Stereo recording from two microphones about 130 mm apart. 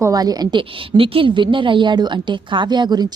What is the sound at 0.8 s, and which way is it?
A woman's voice, 45° right (ahead or behind).